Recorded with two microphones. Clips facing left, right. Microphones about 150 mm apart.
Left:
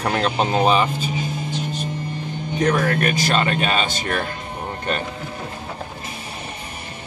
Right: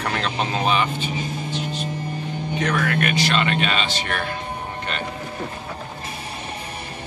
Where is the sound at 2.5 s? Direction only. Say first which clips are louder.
Left 4 dB; 40° left (ahead or behind).